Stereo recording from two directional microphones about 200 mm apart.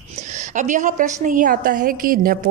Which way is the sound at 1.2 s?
40° right (ahead or behind).